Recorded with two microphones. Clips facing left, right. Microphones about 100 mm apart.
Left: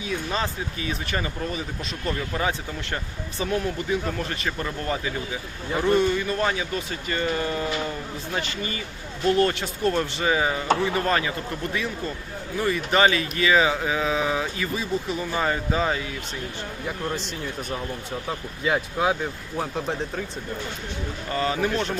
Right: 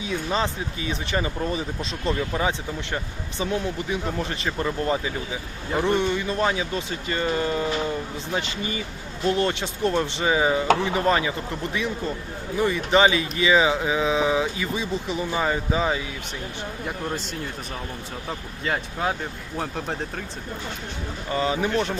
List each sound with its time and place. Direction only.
0.0 s speech: 20° right (ahead or behind)
2.3 s speech: 15° right (ahead or behind)
5.9 s speech: 20° right (ahead or behind); by 20.0 s 5° left (ahead or behind)
21.2 s speech: 20° right (ahead or behind)